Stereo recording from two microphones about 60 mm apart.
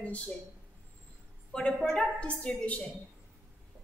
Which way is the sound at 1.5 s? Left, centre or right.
Centre.